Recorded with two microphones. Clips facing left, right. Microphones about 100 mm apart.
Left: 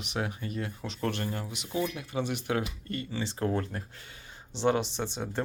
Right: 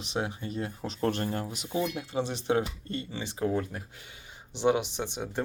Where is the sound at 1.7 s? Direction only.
25° right (ahead or behind).